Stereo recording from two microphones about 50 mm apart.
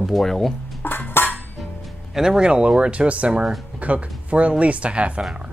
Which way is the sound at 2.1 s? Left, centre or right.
Centre.